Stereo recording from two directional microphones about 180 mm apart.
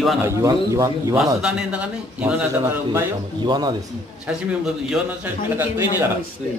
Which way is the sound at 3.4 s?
25° right (ahead or behind).